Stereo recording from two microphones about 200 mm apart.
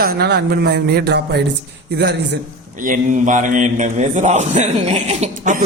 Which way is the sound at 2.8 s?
40° right (ahead or behind).